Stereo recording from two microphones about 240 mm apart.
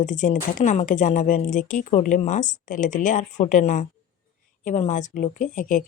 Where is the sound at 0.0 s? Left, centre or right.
Left.